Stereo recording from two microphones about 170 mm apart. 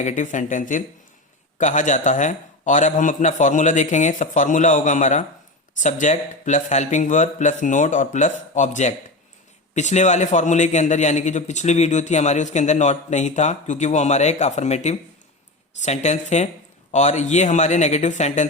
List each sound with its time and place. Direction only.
0.0 s a man's voice: 45° left (ahead or behind)